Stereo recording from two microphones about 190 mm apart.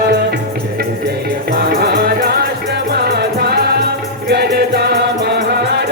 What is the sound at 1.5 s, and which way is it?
Music, 55° right (ahead or behind).